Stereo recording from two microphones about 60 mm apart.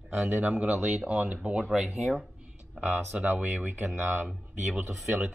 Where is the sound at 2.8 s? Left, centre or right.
Right.